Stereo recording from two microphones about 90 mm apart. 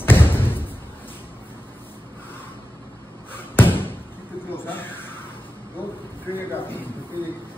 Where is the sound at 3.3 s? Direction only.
25° left (ahead or behind).